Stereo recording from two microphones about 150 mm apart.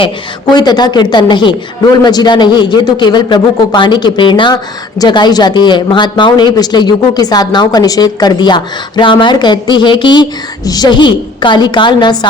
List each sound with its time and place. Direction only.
0.5 s a man's voice: 30° left (ahead or behind)